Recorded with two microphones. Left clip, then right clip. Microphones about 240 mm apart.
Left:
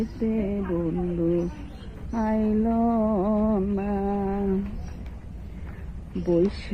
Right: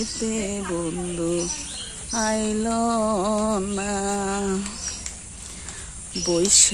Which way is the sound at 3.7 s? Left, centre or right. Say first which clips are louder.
Right 2 dB; right.